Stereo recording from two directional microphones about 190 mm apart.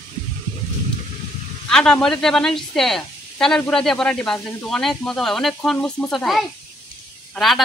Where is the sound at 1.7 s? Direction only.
5° left (ahead or behind).